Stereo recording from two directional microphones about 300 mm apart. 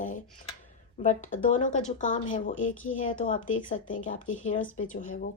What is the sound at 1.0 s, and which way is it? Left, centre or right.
Speech, left.